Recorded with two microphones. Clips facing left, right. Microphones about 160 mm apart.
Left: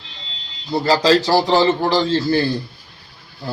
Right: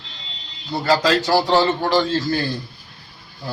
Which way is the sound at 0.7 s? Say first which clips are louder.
Left 3 dB; 30° left (ahead or behind).